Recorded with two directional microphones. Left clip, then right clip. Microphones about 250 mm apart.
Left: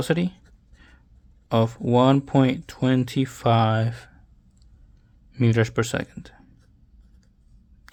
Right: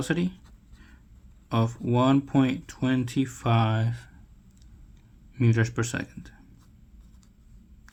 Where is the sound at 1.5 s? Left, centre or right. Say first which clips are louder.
Left 7 dB; left.